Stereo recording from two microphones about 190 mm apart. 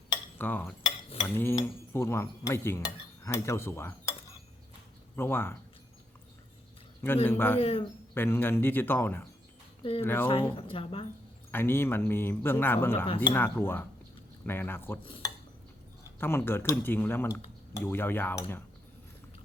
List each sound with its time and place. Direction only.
0.3 s cutlery: 10° left (ahead or behind)
5.1 s cutlery: 10° left (ahead or behind)
7.3 s cutlery: 10° left (ahead or behind)
7.6 s a man's voice: 30° left (ahead or behind)
8.1 s cutlery: 10° left (ahead or behind)
10.5 s speech: 30° left (ahead or behind)
11.5 s cutlery: 10° left (ahead or behind)
15.0 s dishes: 25° left (ahead or behind)
16.2 s cutlery: 10° left (ahead or behind)